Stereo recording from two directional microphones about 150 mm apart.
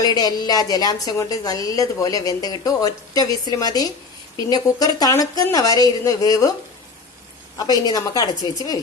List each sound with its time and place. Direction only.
0.0 s a woman's voice: 25° left (ahead or behind)
7.9 s a woman's voice: 25° left (ahead or behind)